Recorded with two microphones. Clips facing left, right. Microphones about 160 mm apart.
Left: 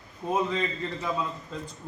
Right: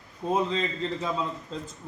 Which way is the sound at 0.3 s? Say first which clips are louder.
Right 1 dB; 25° right (ahead or behind).